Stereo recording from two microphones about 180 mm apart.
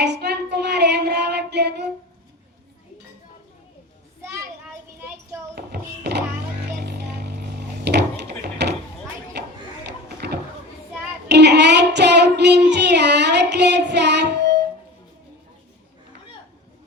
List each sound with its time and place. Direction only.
0.0 s child singing: 70° right (ahead or behind)
5.5 s a sound: 65° right (ahead or behind)
11.3 s child singing: 70° right (ahead or behind)